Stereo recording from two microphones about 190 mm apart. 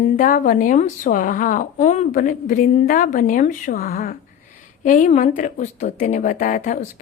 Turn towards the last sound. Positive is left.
turn(degrees=40)  # may be behind; listen again after turning